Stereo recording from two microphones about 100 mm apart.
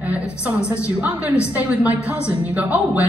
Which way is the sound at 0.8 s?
15° right (ahead or behind).